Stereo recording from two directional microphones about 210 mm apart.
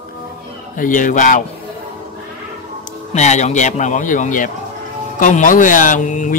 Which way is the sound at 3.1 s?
35° left (ahead or behind).